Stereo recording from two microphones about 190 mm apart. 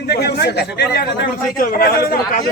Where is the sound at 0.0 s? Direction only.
60° left (ahead or behind).